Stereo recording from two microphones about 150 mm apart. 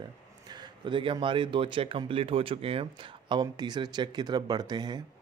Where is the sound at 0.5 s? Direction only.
30° right (ahead or behind).